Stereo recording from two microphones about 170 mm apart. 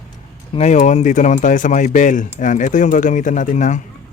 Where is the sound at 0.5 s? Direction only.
45° left (ahead or behind).